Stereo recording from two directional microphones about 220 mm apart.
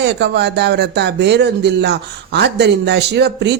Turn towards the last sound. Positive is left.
turn(degrees=-50)  # may be behind; listen again after turning